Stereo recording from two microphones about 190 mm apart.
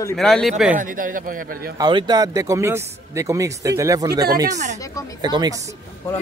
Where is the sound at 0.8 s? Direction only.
45° right (ahead or behind).